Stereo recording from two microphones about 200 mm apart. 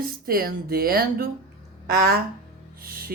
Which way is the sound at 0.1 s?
45° right (ahead or behind).